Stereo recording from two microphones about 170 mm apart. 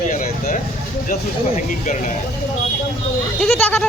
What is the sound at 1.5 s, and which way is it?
Speech, 45° left (ahead or behind).